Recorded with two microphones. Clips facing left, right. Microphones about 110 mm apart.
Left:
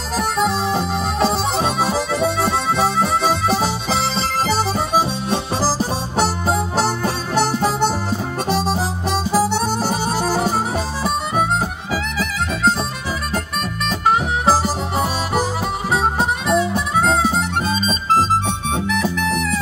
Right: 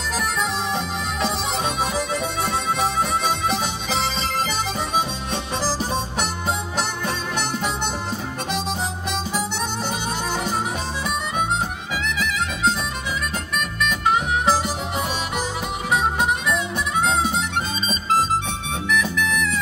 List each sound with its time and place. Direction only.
0.2 s music: 35° left (ahead or behind)
4.5 s harmonica: 35° left (ahead or behind)
11.9 s music: 40° left (ahead or behind)
15.9 s harmonica: 35° left (ahead or behind)
18.9 s music: 35° left (ahead or behind)